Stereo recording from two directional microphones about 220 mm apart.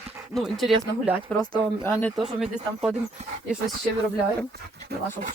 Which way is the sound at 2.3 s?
Centre (ahead or behind).